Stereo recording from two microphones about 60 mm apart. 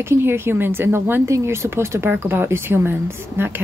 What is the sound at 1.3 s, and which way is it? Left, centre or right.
Speech, right.